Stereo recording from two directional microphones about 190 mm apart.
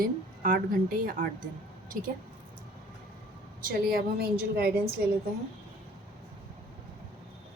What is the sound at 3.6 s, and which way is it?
A woman's voice, 50° right (ahead or behind).